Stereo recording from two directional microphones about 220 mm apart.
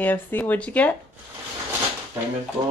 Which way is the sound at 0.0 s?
10° left (ahead or behind).